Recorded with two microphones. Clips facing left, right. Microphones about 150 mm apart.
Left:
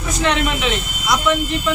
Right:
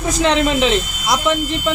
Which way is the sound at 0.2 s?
30° right (ahead or behind).